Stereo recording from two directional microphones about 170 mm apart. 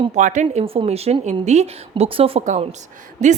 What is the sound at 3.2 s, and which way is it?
Speech, 45° right (ahead or behind).